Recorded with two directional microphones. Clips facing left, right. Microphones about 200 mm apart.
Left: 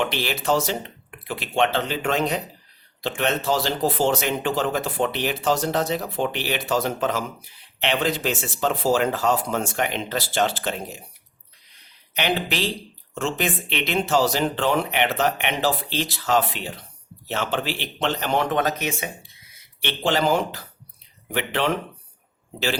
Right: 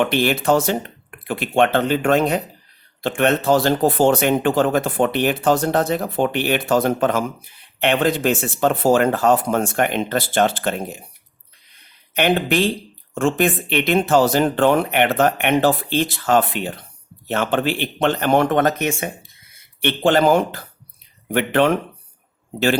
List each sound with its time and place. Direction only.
0.0 s speech: 55° right (ahead or behind)
12.1 s speech: 50° right (ahead or behind)